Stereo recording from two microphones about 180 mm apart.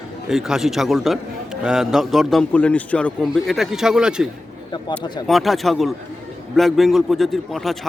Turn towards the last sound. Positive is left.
turn(degrees=0)  # may be behind; listen again after turning